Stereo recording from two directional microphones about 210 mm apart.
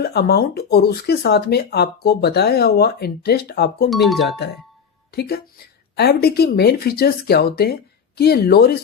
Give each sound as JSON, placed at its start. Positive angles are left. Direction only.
{"t": 0.0, "sound": "speech", "side_deg": 50}
{"t": 3.8, "sound": "speech", "side_deg": 0}
{"t": 5.1, "sound": "speech", "side_deg": 50}